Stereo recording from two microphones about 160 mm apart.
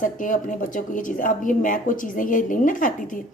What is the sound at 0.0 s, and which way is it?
A woman's voice, 55° left (ahead or behind).